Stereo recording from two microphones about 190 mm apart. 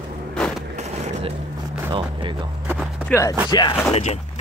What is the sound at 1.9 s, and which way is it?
Music, 25° right (ahead or behind).